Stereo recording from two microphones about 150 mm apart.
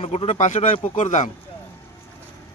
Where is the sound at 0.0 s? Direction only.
40° left (ahead or behind).